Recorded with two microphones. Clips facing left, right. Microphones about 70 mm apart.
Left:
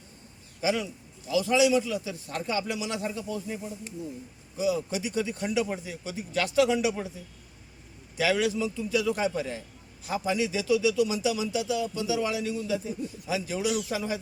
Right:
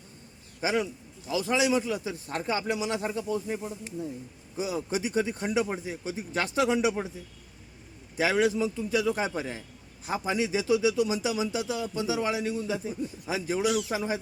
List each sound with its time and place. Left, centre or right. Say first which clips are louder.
0.6 s a man's voice: even; right
8.1 s a man's voice: right 1 dB; right